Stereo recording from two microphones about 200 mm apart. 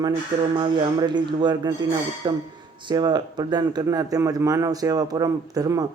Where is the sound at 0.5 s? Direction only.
20° right (ahead or behind).